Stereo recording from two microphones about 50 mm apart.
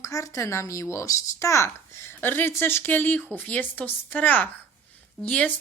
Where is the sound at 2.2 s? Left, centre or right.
Left.